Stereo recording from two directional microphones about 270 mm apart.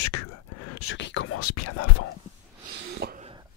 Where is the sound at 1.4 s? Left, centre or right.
Left.